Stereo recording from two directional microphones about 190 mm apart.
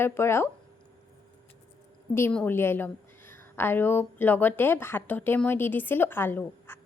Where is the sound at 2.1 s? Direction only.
10° left (ahead or behind).